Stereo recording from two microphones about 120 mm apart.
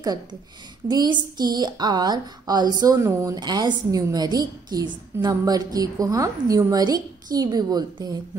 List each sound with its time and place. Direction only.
0.0 s a woman's voice: 35° right (ahead or behind)
3.3 s a woman's voice: 35° right (ahead or behind)